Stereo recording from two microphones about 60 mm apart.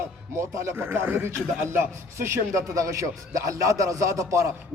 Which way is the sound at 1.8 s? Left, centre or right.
Right.